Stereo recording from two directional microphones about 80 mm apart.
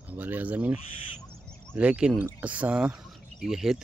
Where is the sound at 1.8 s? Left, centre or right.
Centre.